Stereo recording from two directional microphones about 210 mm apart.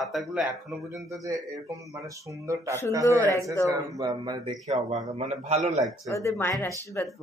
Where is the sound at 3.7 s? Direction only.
20° right (ahead or behind).